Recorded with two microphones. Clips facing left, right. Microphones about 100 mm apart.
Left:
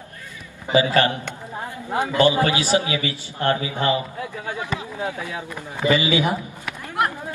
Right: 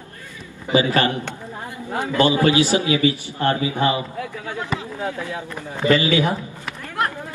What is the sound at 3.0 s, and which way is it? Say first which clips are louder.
Speech: right 6 dB; 30° right (ahead or behind).